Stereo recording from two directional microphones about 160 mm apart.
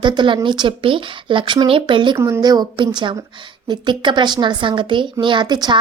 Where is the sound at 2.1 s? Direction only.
20° right (ahead or behind).